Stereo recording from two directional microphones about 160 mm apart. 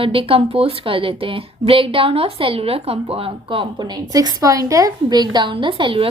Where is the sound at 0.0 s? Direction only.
35° right (ahead or behind).